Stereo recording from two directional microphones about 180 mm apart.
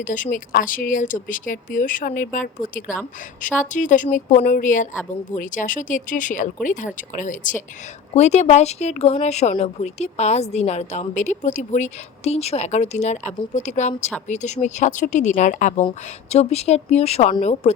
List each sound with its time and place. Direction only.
0.0 s speech: 45° left (ahead or behind)